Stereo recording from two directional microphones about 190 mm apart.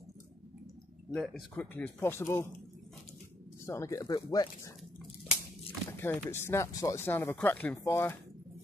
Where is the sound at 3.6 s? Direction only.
15° left (ahead or behind).